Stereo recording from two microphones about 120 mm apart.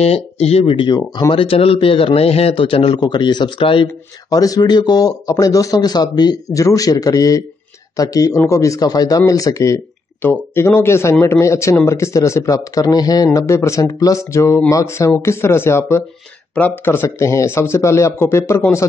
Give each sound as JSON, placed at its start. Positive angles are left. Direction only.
{"t": 0.0, "sound": "a man's voice", "side_deg": 60}
{"t": 1.3, "sound": "a man's voice", "side_deg": 50}
{"t": 3.0, "sound": "speech", "side_deg": 35}
{"t": 4.3, "sound": "speech", "side_deg": 30}